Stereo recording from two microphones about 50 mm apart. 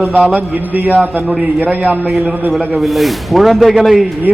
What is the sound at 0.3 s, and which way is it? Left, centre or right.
A man's voice, right.